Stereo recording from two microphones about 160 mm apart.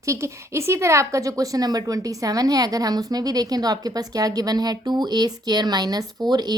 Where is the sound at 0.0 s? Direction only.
20° right (ahead or behind).